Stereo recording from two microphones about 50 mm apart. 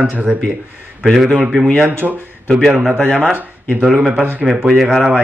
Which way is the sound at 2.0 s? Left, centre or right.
Right.